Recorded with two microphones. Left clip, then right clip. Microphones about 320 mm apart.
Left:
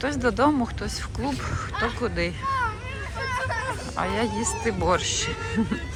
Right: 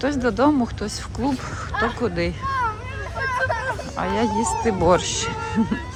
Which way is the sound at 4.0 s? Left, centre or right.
Centre.